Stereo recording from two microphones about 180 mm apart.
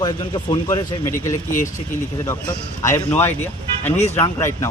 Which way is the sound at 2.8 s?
15° left (ahead or behind).